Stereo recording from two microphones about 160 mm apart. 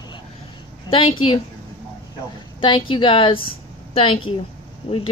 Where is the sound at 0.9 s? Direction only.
35° left (ahead or behind).